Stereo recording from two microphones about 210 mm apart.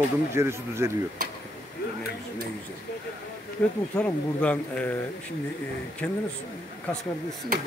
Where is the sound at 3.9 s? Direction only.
5° left (ahead or behind).